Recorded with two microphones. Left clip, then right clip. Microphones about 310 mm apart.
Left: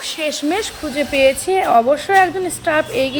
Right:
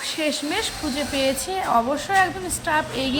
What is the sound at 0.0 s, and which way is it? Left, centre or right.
Speech, centre.